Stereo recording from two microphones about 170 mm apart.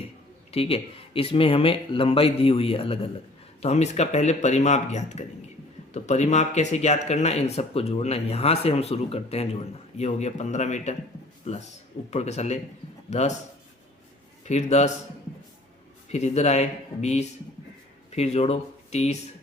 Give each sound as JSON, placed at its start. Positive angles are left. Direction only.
{"t": 0.5, "sound": "a man's voice", "side_deg": 35}
{"t": 14.4, "sound": "a man's voice", "side_deg": 40}
{"t": 16.1, "sound": "speech", "side_deg": 40}